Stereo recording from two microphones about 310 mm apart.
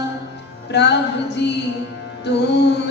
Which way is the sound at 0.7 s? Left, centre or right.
Left.